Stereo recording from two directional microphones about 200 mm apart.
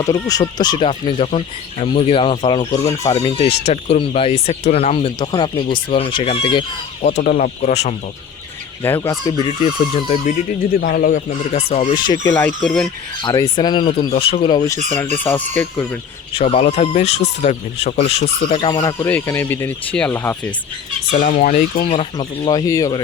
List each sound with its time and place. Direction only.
0.0 s speech: 15° left (ahead or behind)
3.2 s speech: 30° left (ahead or behind)
7.1 s speech: 40° left (ahead or behind)
8.8 s speech: 10° left (ahead or behind)
9.4 s speech: 30° left (ahead or behind)
10.8 s speech: 45° left (ahead or behind)
12.3 s speech: 10° left (ahead or behind)
13.2 s speech: 20° left (ahead or behind)
15.1 s speech: 10° left (ahead or behind)
16.3 s speech: 30° left (ahead or behind)
18.7 s speech: 15° left (ahead or behind)
21.1 s speech: 40° left (ahead or behind); by 23.0 s 15° left (ahead or behind)